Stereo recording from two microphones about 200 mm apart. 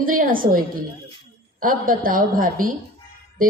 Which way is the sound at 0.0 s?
45° right (ahead or behind).